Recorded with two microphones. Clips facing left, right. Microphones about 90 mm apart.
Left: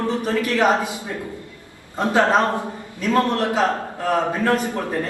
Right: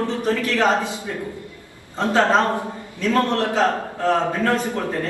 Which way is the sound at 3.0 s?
20° left (ahead or behind).